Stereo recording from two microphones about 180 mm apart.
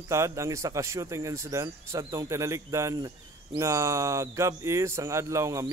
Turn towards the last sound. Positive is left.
turn(degrees=-15)  # may be behind; listen again after turning